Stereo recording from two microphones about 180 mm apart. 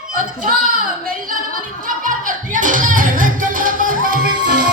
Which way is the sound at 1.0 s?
50° right (ahead or behind).